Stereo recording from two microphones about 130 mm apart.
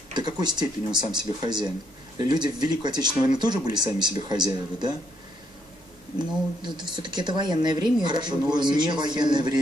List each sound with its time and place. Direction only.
0.1 s speech: 35° right (ahead or behind)
6.1 s speech: 35° right (ahead or behind)